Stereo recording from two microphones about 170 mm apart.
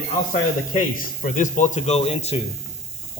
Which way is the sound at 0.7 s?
50° left (ahead or behind).